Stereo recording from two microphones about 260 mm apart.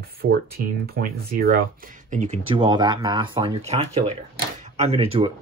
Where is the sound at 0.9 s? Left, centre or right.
Right.